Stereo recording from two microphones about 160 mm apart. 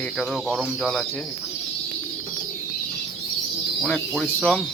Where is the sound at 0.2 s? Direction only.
Centre (ahead or behind).